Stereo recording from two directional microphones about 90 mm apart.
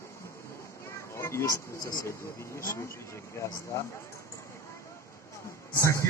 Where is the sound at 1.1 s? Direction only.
30° left (ahead or behind).